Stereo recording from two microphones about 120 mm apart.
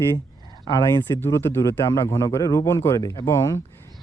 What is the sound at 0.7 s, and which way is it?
Speech, 35° left (ahead or behind).